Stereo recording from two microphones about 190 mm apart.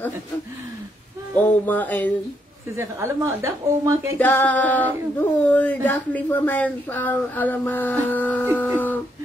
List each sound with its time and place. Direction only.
1.7 s speech: 10° left (ahead or behind)
2.7 s a woman's voice: 15° right (ahead or behind)
4.2 s speech: 10° left (ahead or behind)